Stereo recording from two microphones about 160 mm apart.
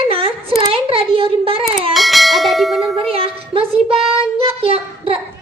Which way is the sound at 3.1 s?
35° right (ahead or behind).